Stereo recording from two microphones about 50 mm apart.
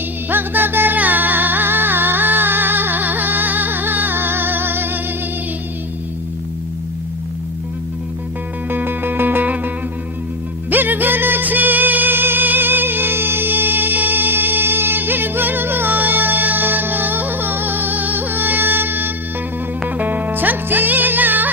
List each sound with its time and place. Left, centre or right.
0.3 s music: right
8.7 s music: right